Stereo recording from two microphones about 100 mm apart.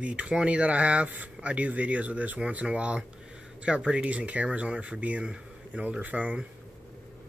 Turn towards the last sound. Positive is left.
turn(degrees=-15)  # may be behind; listen again after turning